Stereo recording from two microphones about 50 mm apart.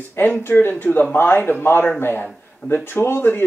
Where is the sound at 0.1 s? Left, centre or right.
Left.